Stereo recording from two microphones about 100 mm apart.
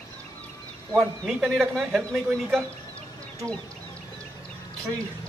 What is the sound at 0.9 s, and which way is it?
Speech, 5° left (ahead or behind).